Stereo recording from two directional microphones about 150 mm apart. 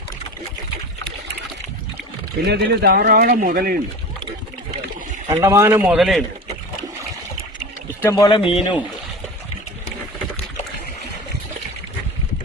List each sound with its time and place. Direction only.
2.4 s speech: 90° right
5.3 s a man's voice: 20° right (ahead or behind); by 6.2 s centre (ahead or behind)
8.1 s speech: 30° left (ahead or behind)